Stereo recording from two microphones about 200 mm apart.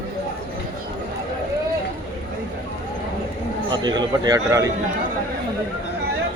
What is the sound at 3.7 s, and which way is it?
Speech, 20° right (ahead or behind).